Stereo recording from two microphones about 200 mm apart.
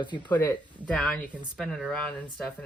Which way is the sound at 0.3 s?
10° left (ahead or behind).